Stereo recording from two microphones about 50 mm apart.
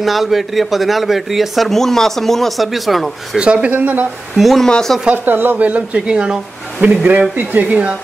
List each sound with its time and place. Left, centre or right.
0.0 s a man's voice: centre
3.3 s speech: centre
4.4 s a man's voice: centre
4.6 s speech: centre
5.1 s speech: right
5.6 s speech: right
5.9 s speech: centre
6.8 s speech: right